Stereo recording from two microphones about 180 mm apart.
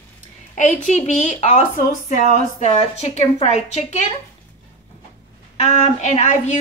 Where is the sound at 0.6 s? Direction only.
45° left (ahead or behind).